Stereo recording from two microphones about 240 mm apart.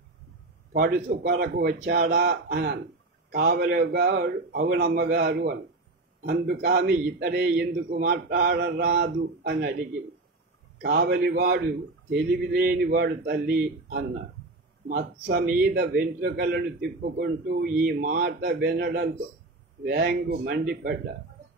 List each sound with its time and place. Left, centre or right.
0.7 s a man's voice: right
10.8 s a man's voice: right